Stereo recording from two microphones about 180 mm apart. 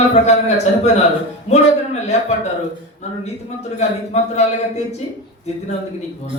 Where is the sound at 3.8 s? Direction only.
40° left (ahead or behind).